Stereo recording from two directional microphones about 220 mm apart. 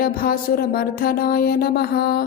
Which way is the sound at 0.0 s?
40° left (ahead or behind).